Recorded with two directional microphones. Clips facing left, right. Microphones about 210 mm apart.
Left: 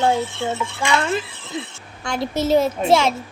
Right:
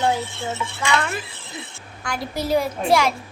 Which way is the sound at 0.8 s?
30° left (ahead or behind).